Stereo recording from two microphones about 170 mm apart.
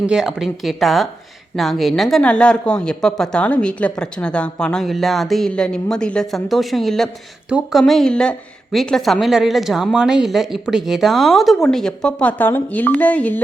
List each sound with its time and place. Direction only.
0.1 s speech: 5° right (ahead or behind)